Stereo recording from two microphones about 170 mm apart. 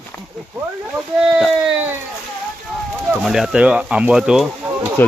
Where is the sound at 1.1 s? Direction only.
5° right (ahead or behind).